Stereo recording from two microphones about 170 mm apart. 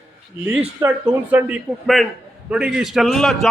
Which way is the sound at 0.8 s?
10° right (ahead or behind).